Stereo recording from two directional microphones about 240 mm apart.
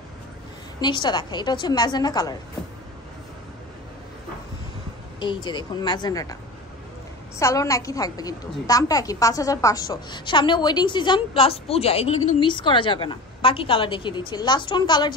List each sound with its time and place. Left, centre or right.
0.7 s a woman's voice: centre
5.2 s a woman's voice: centre
7.3 s a woman's voice: centre